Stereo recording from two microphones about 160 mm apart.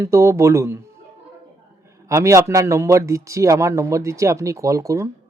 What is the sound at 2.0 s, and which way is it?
Speech, 20° right (ahead or behind).